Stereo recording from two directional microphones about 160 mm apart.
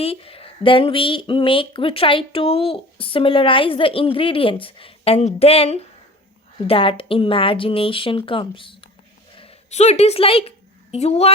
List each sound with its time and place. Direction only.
0.0 s a woman's voice: 35° left (ahead or behind)